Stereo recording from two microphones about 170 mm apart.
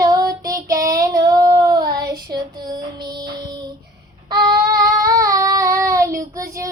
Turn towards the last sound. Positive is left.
turn(degrees=-20)  # may be behind; listen again after turning